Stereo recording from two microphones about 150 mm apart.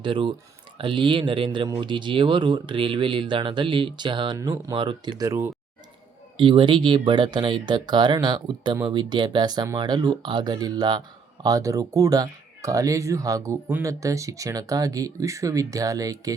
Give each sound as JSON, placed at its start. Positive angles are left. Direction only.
{"t": 0.0, "sound": "speech", "side_deg": -35}
{"t": 6.3, "sound": "speech", "side_deg": -35}